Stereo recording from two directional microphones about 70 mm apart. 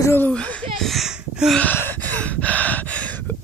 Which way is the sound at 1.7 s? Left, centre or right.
Left.